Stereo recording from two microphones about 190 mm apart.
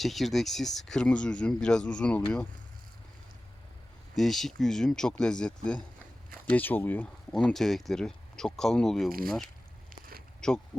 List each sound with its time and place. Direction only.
0.0 s speech: centre (ahead or behind)
4.1 s speech: centre (ahead or behind)
9.9 s a sound: 50° right (ahead or behind)